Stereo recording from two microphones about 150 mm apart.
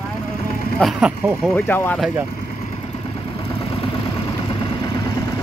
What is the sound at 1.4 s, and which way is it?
Speech, 10° left (ahead or behind).